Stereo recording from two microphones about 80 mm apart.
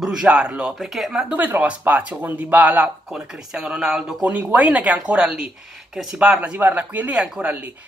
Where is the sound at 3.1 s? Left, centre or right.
Centre.